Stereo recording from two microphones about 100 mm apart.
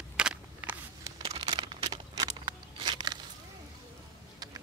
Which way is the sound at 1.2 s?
65° right (ahead or behind).